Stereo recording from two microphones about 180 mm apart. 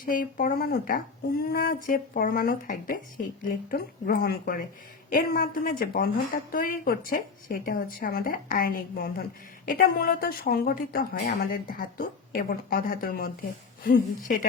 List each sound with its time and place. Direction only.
0.0 s a woman's voice: 50° left (ahead or behind)